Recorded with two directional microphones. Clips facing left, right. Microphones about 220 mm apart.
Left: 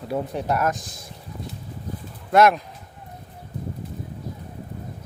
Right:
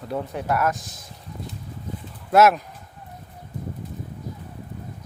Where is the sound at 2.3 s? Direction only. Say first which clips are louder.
Even; 5° right (ahead or behind).